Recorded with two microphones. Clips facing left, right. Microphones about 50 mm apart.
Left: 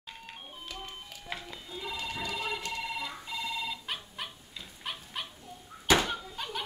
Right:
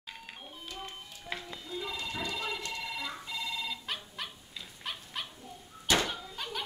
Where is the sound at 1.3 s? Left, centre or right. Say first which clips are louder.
Right 2 dB; centre.